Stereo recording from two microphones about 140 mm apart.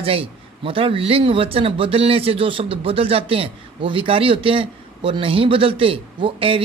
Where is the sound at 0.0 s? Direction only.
40° right (ahead or behind).